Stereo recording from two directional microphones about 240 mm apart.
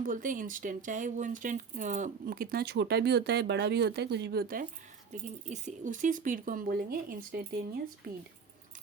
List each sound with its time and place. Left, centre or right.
0.0 s speech: right